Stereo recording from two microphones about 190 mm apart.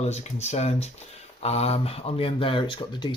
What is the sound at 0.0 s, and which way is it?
Speech, 35° left (ahead or behind).